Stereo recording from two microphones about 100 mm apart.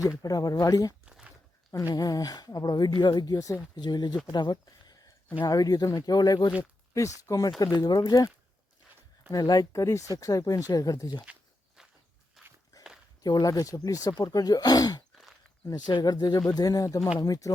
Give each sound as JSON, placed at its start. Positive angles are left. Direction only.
{"t": 0.2, "sound": "speech", "side_deg": 40}
{"t": 1.0, "sound": "a sound", "side_deg": -10}
{"t": 1.9, "sound": "speech", "side_deg": 40}
{"t": 3.8, "sound": "speech", "side_deg": 45}
{"t": 9.3, "sound": "speech", "side_deg": 40}
{"t": 11.8, "sound": "walk", "side_deg": -5}
{"t": 13.2, "sound": "speech", "side_deg": 40}
{"t": 15.1, "sound": "a sound", "side_deg": 0}
{"t": 15.9, "sound": "speech", "side_deg": 50}